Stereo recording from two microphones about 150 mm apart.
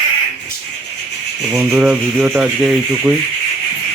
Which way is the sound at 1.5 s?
15° right (ahead or behind).